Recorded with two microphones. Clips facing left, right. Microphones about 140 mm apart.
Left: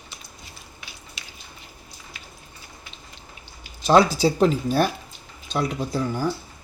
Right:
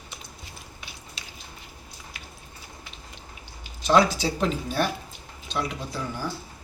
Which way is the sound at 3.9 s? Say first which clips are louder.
Left 4 dB; 35° left (ahead or behind).